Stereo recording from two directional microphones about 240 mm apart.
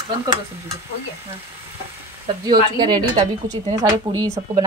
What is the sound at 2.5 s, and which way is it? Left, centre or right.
Speech, centre.